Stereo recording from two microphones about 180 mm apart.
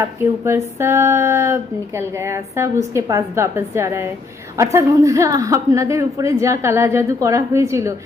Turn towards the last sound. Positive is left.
turn(degrees=-15)  # may be behind; listen again after turning